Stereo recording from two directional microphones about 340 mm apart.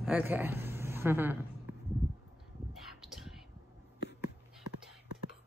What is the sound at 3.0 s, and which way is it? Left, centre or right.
Whispering, centre.